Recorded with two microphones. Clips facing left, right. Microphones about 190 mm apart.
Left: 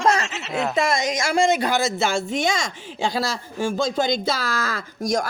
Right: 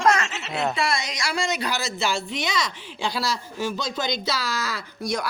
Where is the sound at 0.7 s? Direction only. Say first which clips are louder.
Left 5 dB; 45° left (ahead or behind).